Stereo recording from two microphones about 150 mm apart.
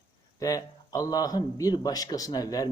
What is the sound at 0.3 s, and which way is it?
A man's voice, 25° left (ahead or behind).